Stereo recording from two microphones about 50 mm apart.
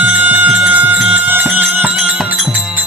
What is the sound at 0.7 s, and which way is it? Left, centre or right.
Music, right.